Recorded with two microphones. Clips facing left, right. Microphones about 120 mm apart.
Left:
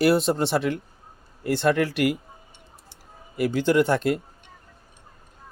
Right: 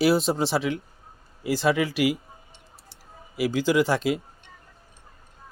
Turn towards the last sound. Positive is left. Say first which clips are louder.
# left 2 dB
turn(degrees=0)  # may be behind; listen again after turning